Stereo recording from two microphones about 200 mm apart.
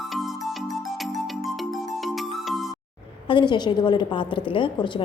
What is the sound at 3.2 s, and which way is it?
Speech, 25° left (ahead or behind).